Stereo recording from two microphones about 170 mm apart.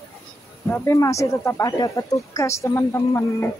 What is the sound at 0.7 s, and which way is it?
Speech, 15° left (ahead or behind).